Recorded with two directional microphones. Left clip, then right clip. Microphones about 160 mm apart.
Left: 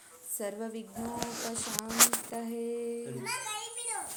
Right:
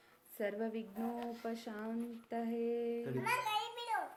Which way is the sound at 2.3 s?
15° left (ahead or behind).